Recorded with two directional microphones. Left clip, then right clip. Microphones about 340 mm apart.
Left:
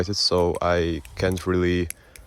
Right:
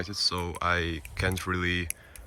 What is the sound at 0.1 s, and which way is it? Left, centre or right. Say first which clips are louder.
Speech: left 9 dB; centre.